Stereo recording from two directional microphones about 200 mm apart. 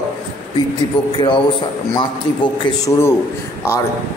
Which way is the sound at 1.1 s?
25° left (ahead or behind).